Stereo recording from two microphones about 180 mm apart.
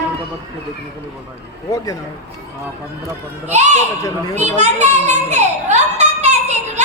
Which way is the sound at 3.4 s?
40° right (ahead or behind).